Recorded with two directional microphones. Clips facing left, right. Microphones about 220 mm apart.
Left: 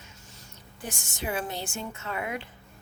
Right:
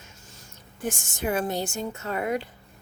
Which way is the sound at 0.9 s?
50° right (ahead or behind).